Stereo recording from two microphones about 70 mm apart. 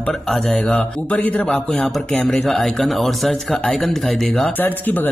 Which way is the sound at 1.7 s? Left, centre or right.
Centre.